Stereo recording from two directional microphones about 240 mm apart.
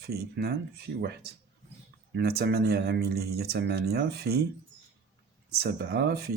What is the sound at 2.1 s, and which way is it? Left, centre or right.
Speech, right.